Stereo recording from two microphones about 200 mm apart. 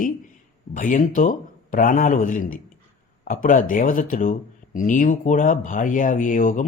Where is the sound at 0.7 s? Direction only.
40° left (ahead or behind).